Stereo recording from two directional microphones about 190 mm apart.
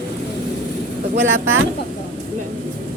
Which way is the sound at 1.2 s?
85° right.